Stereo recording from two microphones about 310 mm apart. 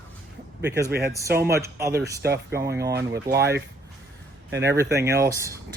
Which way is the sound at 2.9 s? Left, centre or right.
Right.